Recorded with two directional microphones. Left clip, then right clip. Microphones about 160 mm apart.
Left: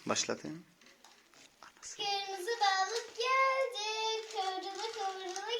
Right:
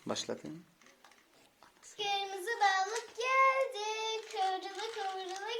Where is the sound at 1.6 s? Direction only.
Centre (ahead or behind).